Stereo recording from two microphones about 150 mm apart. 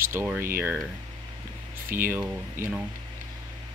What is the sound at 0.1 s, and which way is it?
Speech, 15° right (ahead or behind).